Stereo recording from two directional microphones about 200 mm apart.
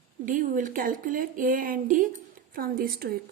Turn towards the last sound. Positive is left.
turn(degrees=-45)  # may be behind; listen again after turning